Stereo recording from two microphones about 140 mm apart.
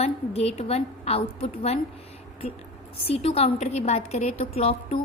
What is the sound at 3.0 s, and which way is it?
A woman's voice, 45° left (ahead or behind).